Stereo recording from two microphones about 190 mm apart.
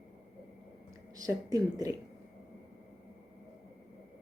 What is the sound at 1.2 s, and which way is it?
Speech, 20° right (ahead or behind).